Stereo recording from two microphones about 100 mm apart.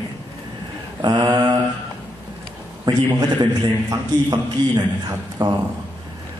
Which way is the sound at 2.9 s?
45° right (ahead or behind).